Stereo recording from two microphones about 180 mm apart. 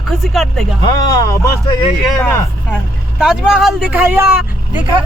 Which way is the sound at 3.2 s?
5° right (ahead or behind).